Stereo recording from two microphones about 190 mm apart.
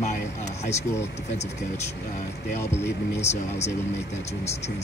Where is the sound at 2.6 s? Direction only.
15° left (ahead or behind).